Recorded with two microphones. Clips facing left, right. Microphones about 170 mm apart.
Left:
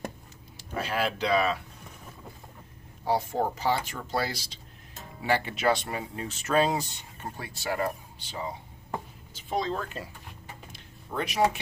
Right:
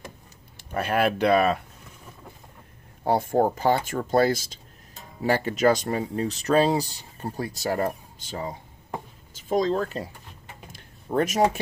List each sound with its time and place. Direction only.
0.6 s speech: 55° right (ahead or behind)
3.1 s speech: 50° right (ahead or behind)
10.7 s a sound: 45° right (ahead or behind)